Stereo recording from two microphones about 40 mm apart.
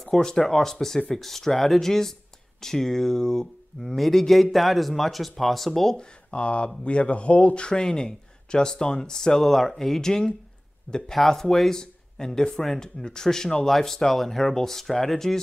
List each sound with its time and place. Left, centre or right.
0.0 s speech: centre
5.9 s a man's voice: left; by 15.3 s centre